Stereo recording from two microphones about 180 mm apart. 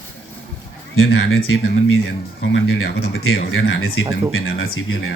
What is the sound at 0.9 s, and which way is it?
Speech, 90° left.